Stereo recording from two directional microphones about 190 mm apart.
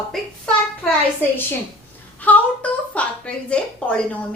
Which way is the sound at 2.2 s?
5° left (ahead or behind).